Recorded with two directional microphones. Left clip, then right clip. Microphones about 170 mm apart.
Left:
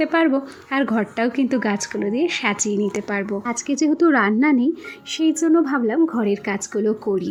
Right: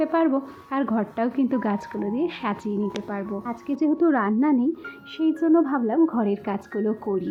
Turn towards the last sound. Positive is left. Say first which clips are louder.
# left 5 dB
turn(degrees=10)  # may be behind; listen again after turning